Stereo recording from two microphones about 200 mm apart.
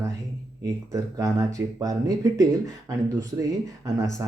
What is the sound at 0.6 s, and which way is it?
Speech, 15° right (ahead or behind).